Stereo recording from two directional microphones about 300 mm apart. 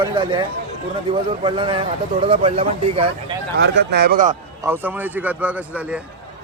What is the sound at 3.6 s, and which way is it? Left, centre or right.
Speech, right.